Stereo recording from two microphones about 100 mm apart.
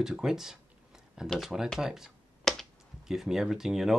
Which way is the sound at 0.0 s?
5° right (ahead or behind).